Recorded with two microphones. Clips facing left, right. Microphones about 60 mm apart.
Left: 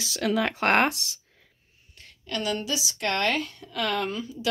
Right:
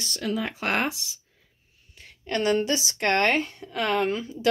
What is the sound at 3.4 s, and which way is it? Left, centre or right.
A woman's voice, right.